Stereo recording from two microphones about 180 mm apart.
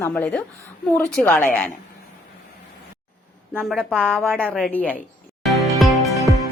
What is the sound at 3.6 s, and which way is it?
A woman's voice, 5° left (ahead or behind).